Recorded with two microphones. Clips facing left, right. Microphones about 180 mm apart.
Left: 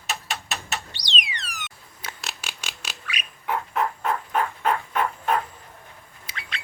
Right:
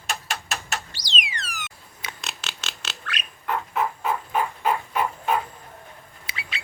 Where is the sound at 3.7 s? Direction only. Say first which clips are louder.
Even; 5° right (ahead or behind).